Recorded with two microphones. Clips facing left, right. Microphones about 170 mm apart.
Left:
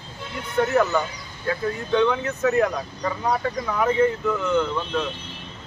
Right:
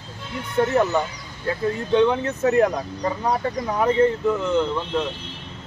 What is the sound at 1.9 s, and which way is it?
Speech, 30° right (ahead or behind).